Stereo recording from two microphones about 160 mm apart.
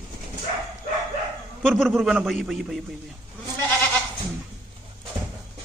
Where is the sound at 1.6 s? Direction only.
Centre (ahead or behind).